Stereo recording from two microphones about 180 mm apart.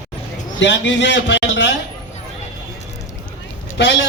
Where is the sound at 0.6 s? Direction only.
80° left.